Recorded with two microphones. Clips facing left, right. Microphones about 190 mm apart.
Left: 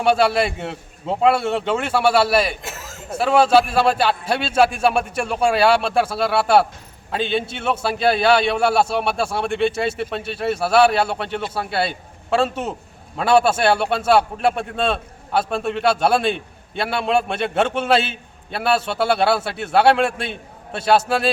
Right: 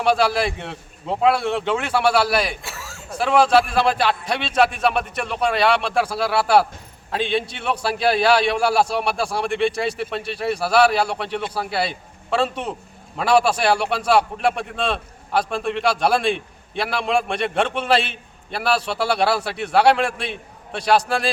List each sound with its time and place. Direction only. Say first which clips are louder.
0.0 s a man's voice: left 2 dB; 5° left (ahead or behind)
2.6 s a sound: left 3 dB; 20° left (ahead or behind)
3.2 s a man's voice: left 1 dB; 5° left (ahead or behind)